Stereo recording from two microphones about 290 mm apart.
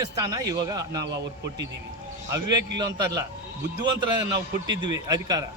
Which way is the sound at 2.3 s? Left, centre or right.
Centre.